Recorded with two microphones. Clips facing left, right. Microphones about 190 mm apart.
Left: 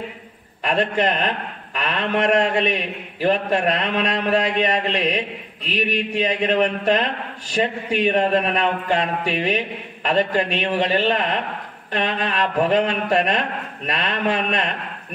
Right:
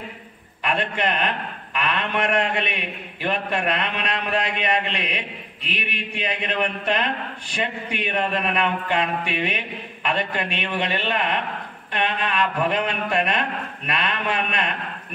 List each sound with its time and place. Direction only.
0.7 s a man's voice: 40° left (ahead or behind)